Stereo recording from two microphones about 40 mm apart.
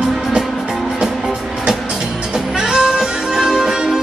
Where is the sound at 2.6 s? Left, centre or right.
Centre.